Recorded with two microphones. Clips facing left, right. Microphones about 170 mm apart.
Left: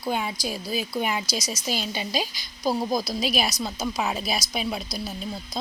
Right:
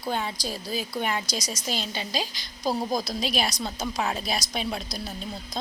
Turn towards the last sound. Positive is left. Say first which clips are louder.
# left 2 dB
turn(degrees=5)  # may be behind; listen again after turning